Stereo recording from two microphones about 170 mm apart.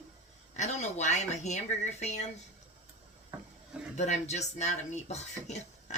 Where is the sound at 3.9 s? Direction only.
40° left (ahead or behind).